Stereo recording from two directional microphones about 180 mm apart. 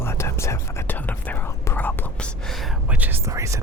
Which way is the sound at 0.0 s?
15° left (ahead or behind).